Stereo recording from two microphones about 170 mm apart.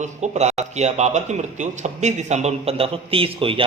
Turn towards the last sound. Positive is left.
turn(degrees=-30)  # may be behind; listen again after turning